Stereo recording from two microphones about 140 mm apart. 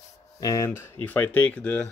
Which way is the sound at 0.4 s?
25° left (ahead or behind).